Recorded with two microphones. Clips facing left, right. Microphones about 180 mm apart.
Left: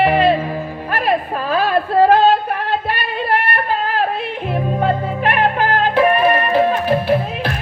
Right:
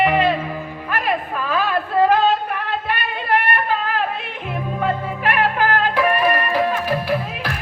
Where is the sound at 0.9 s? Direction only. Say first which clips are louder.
Left 4 dB; 35° left (ahead or behind).